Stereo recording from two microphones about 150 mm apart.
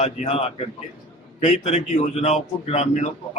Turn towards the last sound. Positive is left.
turn(degrees=45)  # may be behind; listen again after turning